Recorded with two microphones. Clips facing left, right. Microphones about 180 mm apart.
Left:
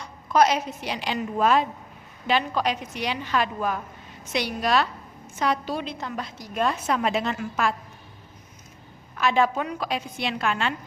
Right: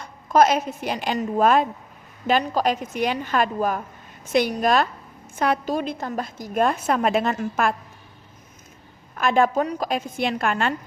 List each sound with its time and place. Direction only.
0.0 s a woman's voice: 50° right (ahead or behind)
9.1 s a woman's voice: 50° right (ahead or behind)